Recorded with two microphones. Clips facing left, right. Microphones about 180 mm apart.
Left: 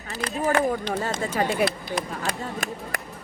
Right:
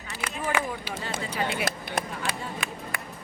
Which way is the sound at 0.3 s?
35° left (ahead or behind).